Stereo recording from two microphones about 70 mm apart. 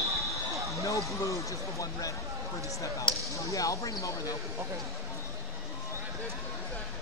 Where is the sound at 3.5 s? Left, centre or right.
Left.